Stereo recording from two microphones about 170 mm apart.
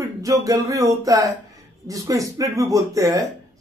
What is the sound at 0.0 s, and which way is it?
Speech, 20° right (ahead or behind).